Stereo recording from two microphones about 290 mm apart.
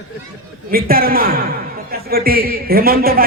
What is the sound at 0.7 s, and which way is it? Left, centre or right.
A man's voice, right.